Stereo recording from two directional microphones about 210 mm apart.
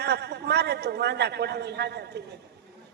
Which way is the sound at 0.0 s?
50° right (ahead or behind).